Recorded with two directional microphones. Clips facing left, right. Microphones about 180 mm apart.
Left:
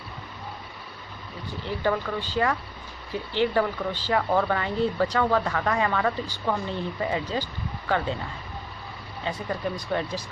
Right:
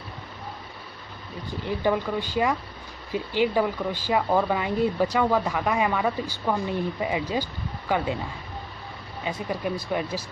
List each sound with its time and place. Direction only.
1.7 s speech: 15° right (ahead or behind)
9.5 s speech: 10° right (ahead or behind)